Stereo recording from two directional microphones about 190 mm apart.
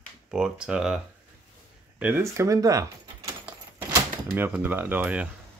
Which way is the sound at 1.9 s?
10° right (ahead or behind).